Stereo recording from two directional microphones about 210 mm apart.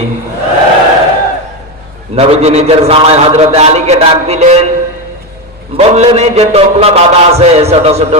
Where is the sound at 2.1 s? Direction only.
30° right (ahead or behind).